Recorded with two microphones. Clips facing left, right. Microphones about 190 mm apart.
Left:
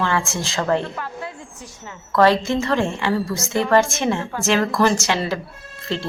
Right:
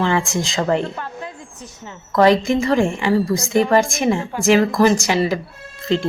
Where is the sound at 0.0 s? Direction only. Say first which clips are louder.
Right 3 dB; 15° right (ahead or behind).